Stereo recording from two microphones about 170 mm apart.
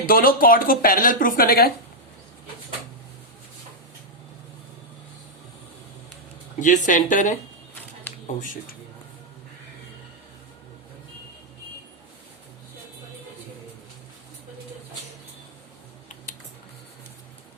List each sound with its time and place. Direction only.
0.0 s speech: 55° left (ahead or behind)
6.6 s speech: 50° left (ahead or behind)
8.4 s speech: 50° left (ahead or behind)